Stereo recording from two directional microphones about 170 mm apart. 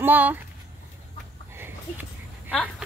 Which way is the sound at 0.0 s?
10° right (ahead or behind).